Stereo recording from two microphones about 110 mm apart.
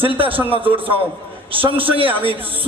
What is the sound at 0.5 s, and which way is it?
A man's voice, 55° right (ahead or behind).